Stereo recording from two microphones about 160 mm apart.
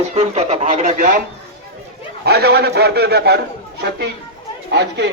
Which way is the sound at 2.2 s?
90° right.